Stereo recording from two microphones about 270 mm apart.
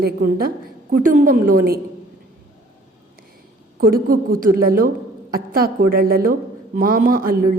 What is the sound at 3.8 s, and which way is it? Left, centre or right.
A woman's voice, right.